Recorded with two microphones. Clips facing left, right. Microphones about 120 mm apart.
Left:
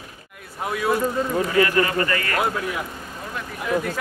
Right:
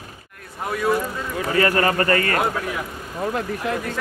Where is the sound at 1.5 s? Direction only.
40° right (ahead or behind).